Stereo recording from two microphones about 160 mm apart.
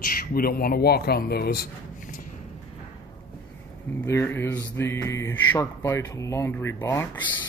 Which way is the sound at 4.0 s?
15° left (ahead or behind).